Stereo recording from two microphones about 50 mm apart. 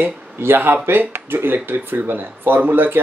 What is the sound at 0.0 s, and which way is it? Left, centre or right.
Speech, right.